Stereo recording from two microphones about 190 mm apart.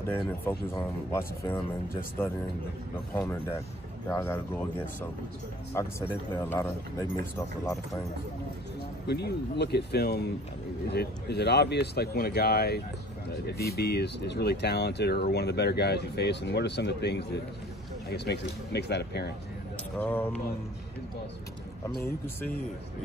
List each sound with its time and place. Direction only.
0.0 s speech: 15° left (ahead or behind)
3.3 s speech: 15° left (ahead or behind)
9.0 s speech: 60° left (ahead or behind)
20.0 s speech: 10° left (ahead or behind)